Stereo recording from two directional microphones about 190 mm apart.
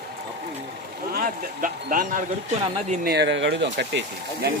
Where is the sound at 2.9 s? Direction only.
55° right (ahead or behind).